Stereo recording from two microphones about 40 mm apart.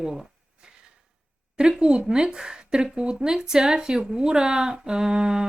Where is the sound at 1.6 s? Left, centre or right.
Centre.